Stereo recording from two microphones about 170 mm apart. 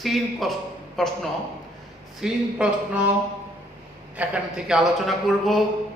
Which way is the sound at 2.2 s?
5° right (ahead or behind).